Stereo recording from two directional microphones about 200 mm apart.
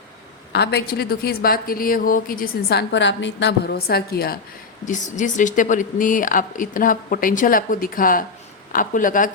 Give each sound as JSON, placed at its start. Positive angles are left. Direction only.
{"t": 0.5, "sound": "a woman's voice", "side_deg": 55}
{"t": 4.9, "sound": "a woman's voice", "side_deg": 40}